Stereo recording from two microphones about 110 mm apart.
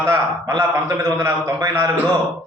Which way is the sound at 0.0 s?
25° right (ahead or behind).